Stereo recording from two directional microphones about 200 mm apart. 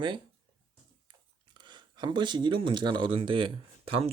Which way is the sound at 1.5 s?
25° right (ahead or behind).